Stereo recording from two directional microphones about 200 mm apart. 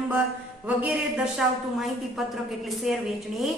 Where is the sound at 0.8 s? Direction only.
5° right (ahead or behind).